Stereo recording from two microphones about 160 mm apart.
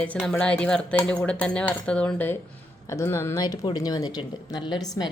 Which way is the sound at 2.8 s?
20° left (ahead or behind).